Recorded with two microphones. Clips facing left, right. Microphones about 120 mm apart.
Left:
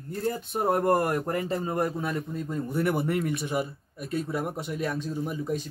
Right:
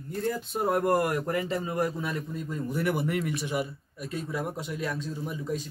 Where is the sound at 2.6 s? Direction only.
50° left (ahead or behind).